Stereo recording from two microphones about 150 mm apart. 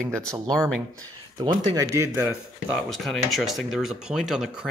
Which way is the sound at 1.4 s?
30° right (ahead or behind).